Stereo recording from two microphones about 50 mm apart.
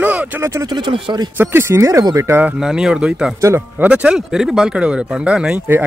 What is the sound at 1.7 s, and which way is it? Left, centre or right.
Speech, right.